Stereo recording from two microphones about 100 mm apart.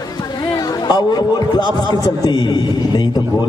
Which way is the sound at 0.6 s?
45° left (ahead or behind).